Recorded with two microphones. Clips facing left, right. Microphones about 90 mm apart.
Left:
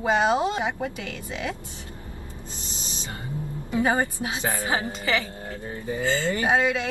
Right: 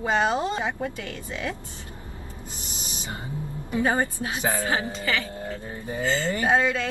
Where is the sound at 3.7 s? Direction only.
15° left (ahead or behind).